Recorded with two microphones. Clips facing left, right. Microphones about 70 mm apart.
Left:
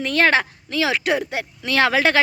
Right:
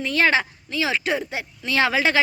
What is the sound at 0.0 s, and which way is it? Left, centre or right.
Speech, left.